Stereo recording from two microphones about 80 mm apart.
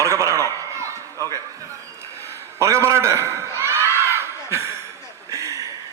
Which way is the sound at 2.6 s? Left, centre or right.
Right.